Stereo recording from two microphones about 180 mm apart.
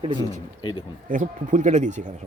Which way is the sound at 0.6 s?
25° left (ahead or behind).